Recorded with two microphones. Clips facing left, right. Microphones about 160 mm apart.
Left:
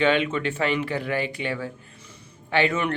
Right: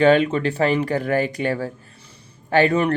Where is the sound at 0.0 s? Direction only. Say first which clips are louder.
Right 6 dB; 40° right (ahead or behind).